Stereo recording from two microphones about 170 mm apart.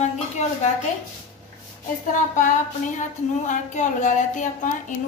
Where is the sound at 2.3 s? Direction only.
50° left (ahead or behind).